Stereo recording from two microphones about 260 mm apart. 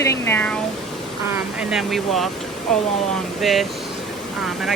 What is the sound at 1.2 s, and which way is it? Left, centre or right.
Speech, centre.